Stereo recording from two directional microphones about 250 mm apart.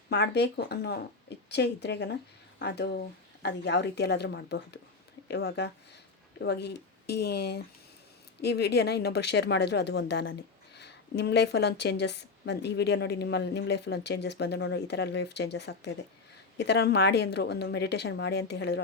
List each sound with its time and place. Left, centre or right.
0.1 s a woman's voice: left